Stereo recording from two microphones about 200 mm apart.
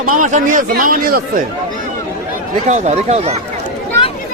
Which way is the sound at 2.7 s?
35° right (ahead or behind).